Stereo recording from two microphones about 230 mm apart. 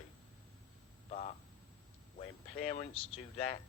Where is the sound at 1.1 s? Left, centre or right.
Left.